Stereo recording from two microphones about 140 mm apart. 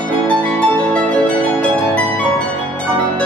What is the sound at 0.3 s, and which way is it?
Music, 10° left (ahead or behind).